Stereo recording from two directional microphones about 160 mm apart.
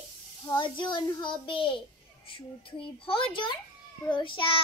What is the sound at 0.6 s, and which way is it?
A child's voice, 30° left (ahead or behind).